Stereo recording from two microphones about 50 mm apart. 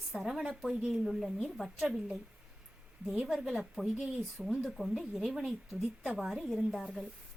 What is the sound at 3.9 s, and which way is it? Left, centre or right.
Speech, right.